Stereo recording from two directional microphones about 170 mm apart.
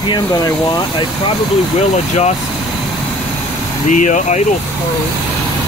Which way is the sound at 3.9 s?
45° left (ahead or behind).